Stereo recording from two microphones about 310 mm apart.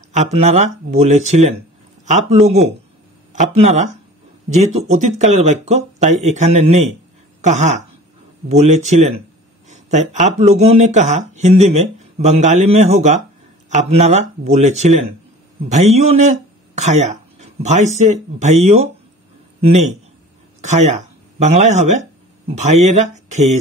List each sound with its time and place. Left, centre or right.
0.1 s speech: right
20.6 s speech: right